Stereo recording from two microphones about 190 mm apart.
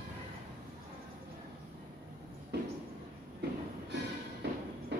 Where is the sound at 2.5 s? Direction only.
60° right (ahead or behind).